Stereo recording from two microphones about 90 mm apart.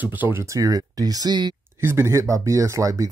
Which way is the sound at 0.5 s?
40° right (ahead or behind).